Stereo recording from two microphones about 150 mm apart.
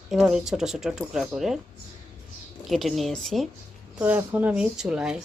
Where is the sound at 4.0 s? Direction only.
10° right (ahead or behind).